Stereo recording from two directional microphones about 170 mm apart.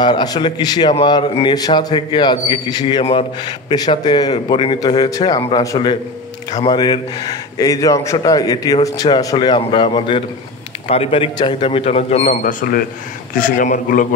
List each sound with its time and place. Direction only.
0.0 s a man's voice: 25° left (ahead or behind); by 14.0 s 50° left (ahead or behind)